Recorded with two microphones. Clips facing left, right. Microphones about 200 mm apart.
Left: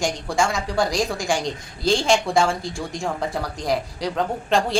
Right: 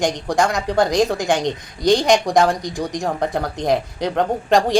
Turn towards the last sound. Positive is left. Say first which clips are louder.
# right 5 dB
turn(degrees=-20)  # may be behind; listen again after turning